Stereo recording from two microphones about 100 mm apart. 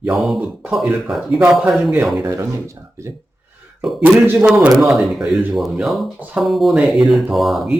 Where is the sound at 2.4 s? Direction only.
30° right (ahead or behind).